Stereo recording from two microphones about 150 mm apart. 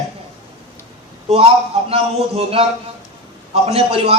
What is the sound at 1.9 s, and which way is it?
A man's voice, 40° right (ahead or behind).